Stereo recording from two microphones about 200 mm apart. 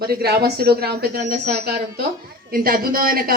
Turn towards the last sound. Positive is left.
turn(degrees=-45)  # may be behind; listen again after turning